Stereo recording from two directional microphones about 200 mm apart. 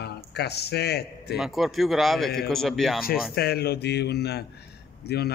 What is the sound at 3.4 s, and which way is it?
A man's voice, 50° left (ahead or behind).